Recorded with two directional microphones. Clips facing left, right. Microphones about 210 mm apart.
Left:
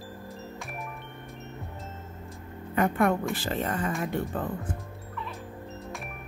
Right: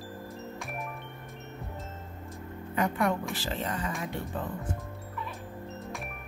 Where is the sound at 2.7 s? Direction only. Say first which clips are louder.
Left 4 dB; 55° left (ahead or behind).